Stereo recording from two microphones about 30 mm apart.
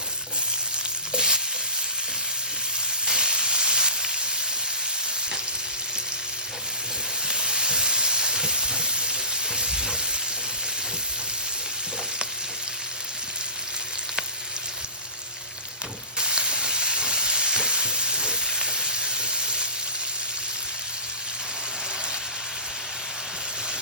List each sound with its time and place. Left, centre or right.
1.1 s stir: right
3.1 s sizzle: right
7.3 s sizzle: right
16.1 s frying: right